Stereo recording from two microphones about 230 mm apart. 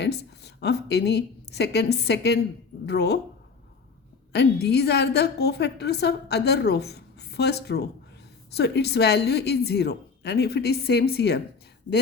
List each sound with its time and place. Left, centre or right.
0.0 s a woman's voice: left
4.3 s a woman's voice: left